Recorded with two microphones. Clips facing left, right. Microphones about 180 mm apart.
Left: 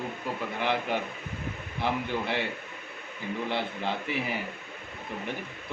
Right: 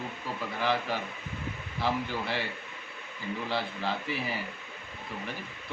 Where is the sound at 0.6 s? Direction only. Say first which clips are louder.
Left 1 dB; 20° left (ahead or behind).